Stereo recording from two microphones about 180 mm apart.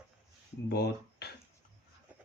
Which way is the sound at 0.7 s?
60° left (ahead or behind).